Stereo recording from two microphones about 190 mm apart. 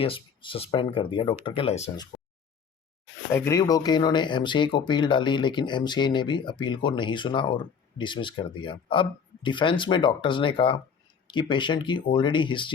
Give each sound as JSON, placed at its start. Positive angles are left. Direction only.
{"t": 0.0, "sound": "speech", "side_deg": 30}
{"t": 3.3, "sound": "speech", "side_deg": 15}